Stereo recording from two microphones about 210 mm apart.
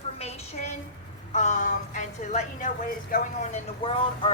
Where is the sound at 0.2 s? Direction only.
30° left (ahead or behind).